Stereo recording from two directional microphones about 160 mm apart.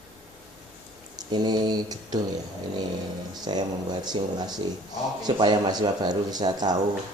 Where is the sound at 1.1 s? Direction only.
25° right (ahead or behind).